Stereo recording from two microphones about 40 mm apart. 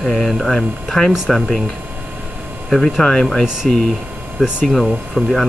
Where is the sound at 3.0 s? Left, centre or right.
Left.